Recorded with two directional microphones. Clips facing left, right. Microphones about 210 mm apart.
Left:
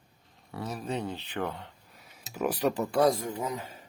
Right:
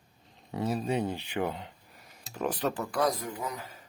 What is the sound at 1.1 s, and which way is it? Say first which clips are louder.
Speech: right 2 dB; 10° right (ahead or behind).